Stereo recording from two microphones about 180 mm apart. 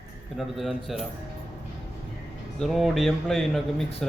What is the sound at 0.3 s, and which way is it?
Speech, centre (ahead or behind).